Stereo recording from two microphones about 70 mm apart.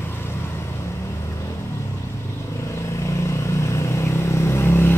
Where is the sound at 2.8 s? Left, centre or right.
Left.